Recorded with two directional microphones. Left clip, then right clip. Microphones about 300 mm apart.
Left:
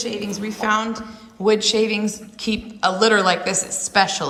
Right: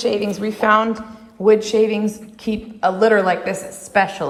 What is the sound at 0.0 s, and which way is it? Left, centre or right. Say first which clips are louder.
A child's voice: right 7 dB; centre.